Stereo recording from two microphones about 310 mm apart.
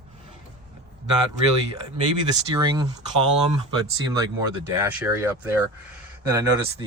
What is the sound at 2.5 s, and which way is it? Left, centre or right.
Speech, centre.